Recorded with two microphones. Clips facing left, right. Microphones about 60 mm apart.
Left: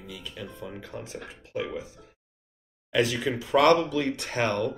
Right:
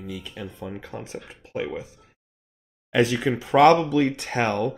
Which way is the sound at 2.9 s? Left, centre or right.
Right.